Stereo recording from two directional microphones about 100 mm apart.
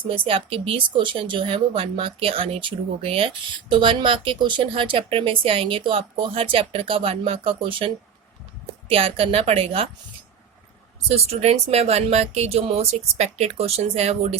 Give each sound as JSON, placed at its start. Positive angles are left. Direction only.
{"t": 0.0, "sound": "speech", "side_deg": -65}
{"t": 8.9, "sound": "a woman's voice", "side_deg": -70}
{"t": 11.1, "sound": "speech", "side_deg": -90}